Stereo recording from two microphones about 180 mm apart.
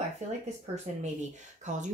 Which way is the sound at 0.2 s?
40° right (ahead or behind).